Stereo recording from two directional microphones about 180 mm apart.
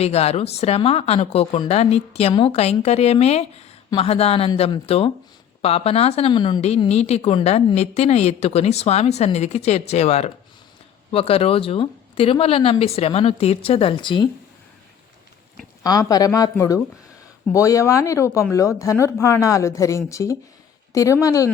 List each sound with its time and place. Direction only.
0.0 s a woman's voice: 35° left (ahead or behind)
15.8 s speech: 20° left (ahead or behind)